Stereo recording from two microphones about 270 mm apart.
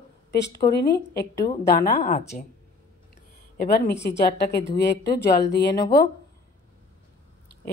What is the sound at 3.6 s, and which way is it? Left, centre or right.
Speech, left.